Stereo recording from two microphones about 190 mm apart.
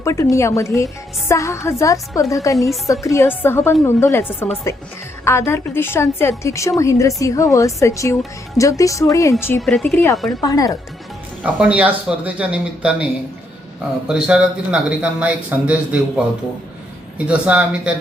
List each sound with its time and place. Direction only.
0.0 s a woman's voice: 15° left (ahead or behind)
9.6 s a woman's voice: 5° left (ahead or behind); by 10.7 s 20° left (ahead or behind)
11.4 s a man's voice: 5° right (ahead or behind)
14.1 s a man's voice: 5° right (ahead or behind)